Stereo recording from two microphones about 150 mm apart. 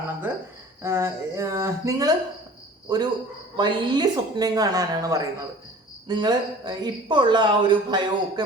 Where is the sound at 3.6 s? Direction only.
30° right (ahead or behind).